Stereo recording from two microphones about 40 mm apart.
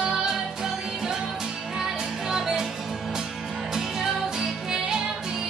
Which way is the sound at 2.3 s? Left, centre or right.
Centre.